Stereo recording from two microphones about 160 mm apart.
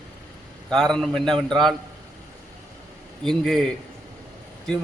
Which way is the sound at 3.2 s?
5° left (ahead or behind).